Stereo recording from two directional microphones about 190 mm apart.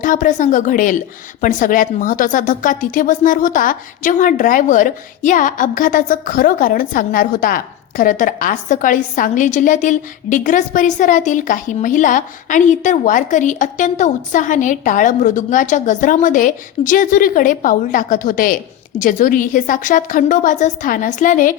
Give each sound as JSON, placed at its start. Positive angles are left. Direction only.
{"t": 0.0, "sound": "a woman's voice", "side_deg": 45}